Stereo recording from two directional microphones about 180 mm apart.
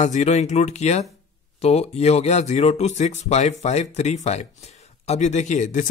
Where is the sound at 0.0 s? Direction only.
40° left (ahead or behind).